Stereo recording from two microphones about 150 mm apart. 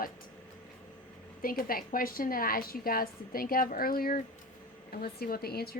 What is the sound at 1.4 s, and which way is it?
A woman's voice, 70° left (ahead or behind).